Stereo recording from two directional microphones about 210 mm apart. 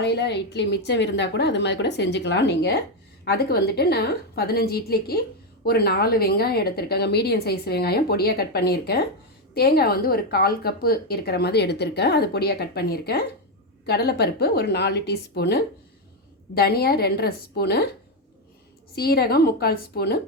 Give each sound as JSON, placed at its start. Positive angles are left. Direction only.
{"t": 0.0, "sound": "a woman's voice", "side_deg": 55}
{"t": 18.9, "sound": "a woman's voice", "side_deg": 50}